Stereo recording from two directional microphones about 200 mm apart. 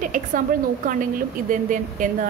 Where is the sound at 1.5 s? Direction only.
40° right (ahead or behind).